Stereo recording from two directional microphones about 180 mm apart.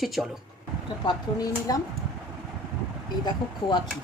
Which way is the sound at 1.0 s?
20° left (ahead or behind).